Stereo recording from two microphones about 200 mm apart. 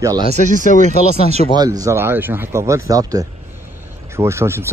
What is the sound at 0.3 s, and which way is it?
Speech, 40° right (ahead or behind).